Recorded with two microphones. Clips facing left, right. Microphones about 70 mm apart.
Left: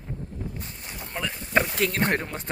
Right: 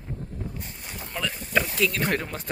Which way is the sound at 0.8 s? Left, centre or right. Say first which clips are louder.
Even; centre.